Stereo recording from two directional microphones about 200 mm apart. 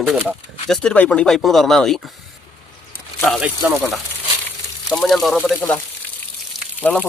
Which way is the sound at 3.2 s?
5° left (ahead or behind).